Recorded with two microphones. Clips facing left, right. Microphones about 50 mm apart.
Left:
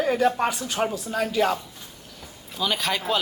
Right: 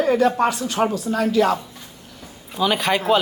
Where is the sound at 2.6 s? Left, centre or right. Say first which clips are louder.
Right 6 dB; centre.